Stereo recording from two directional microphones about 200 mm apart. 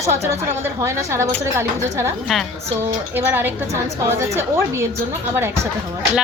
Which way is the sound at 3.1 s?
10° right (ahead or behind).